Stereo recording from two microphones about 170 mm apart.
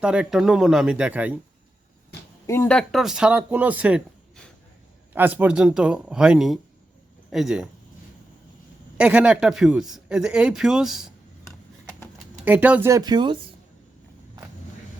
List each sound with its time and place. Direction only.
0.0 s speech: 5° right (ahead or behind)
2.5 s speech: 10° left (ahead or behind); by 4.0 s 10° right (ahead or behind)
5.1 s speech: 10° right (ahead or behind)
9.0 s speech: 5° right (ahead or behind)
12.5 s speech: 10° right (ahead or behind)
12.9 s speech: 25° right (ahead or behind)